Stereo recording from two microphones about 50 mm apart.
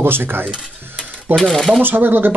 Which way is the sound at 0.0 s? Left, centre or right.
Right.